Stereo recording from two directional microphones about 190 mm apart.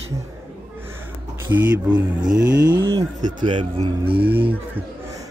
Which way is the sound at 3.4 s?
25° right (ahead or behind).